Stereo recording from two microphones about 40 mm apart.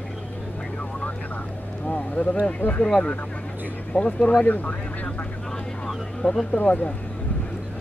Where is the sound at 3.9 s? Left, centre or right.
Left.